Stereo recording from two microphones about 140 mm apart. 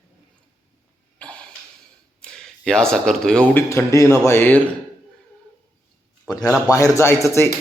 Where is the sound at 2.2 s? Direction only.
5° left (ahead or behind).